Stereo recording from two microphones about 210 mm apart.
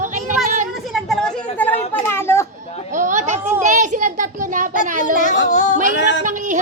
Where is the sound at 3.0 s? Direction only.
35° right (ahead or behind).